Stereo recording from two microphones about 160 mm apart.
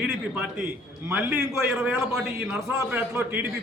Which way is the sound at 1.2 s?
15° right (ahead or behind).